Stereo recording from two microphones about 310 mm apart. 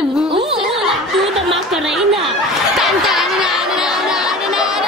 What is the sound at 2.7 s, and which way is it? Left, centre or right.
Chatter, centre.